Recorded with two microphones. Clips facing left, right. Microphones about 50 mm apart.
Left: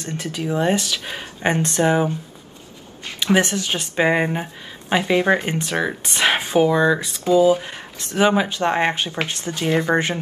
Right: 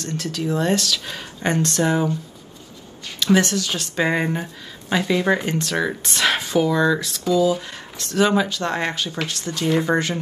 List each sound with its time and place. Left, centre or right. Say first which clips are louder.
0.0 s speech: right 1 dB; left
3.2 s speech: even; left